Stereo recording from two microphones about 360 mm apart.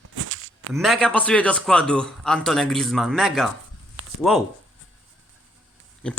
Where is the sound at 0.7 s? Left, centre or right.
Centre.